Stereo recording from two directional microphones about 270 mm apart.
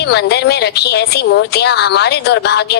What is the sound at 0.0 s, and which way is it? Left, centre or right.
A woman's voice, left.